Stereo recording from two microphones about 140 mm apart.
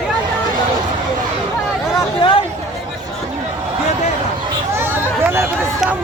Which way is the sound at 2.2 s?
40° left (ahead or behind).